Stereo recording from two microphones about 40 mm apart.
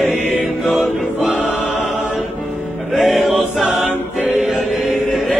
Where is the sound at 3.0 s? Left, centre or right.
Centre.